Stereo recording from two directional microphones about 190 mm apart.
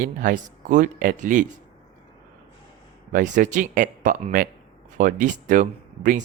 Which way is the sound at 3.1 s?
45° right (ahead or behind).